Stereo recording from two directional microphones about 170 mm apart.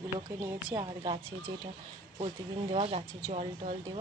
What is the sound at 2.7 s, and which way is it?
Speech, 35° right (ahead or behind).